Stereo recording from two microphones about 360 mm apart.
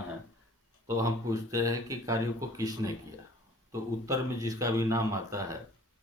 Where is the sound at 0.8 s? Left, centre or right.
Centre.